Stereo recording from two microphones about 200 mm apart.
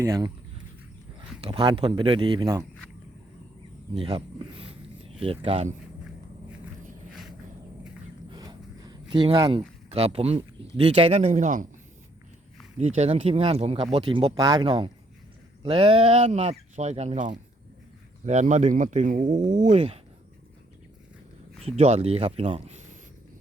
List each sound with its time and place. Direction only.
0.0 s speech: 15° right (ahead or behind)
1.4 s speech: 25° right (ahead or behind)
3.9 s speech: 25° right (ahead or behind)
8.3 s a sound: 20° right (ahead or behind)
10.8 s speech: 30° right (ahead or behind)
12.8 s speech: 35° right (ahead or behind)
21.8 s speech: 30° right (ahead or behind)